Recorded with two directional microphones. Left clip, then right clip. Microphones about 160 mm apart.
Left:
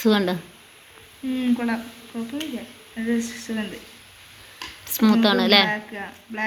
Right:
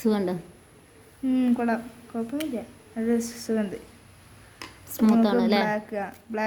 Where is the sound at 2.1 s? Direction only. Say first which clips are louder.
Right 2 dB; 65° right (ahead or behind).